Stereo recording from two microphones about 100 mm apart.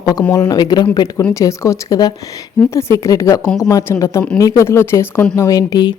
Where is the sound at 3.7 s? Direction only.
30° left (ahead or behind).